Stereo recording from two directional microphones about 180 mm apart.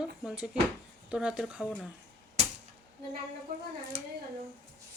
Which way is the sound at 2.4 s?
40° right (ahead or behind).